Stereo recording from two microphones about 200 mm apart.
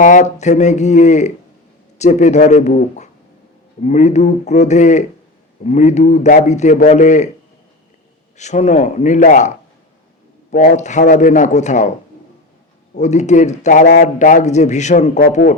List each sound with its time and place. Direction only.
0.0 s a man's voice: 40° left (ahead or behind)
8.4 s a man's voice: 35° left (ahead or behind)
10.5 s a man's voice: 40° left (ahead or behind)
13.0 s a man's voice: 35° left (ahead or behind)